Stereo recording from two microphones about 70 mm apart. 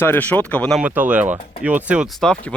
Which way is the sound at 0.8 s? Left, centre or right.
Right.